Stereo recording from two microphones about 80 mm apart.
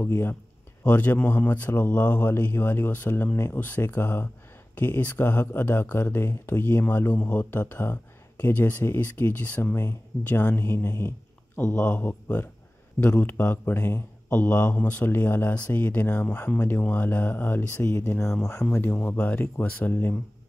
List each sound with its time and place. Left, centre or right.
0.0 s a man's voice: left
11.6 s a man's voice: centre
17.7 s speech: left
19.1 s a man's voice: centre